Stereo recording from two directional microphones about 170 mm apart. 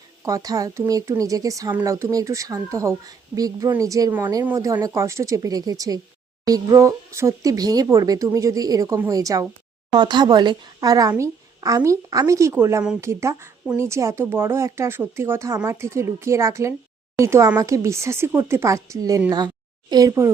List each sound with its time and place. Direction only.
0.3 s speech: 20° right (ahead or behind)